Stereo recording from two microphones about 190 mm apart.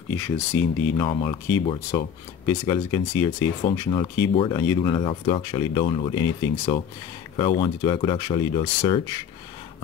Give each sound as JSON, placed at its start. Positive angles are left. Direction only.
{"t": 0.1, "sound": "speech", "side_deg": 10}
{"t": 1.0, "sound": "speech", "side_deg": 25}
{"t": 2.4, "sound": "speech", "side_deg": 15}